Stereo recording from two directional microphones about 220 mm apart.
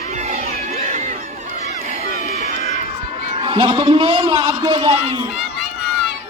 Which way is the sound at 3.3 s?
25° right (ahead or behind).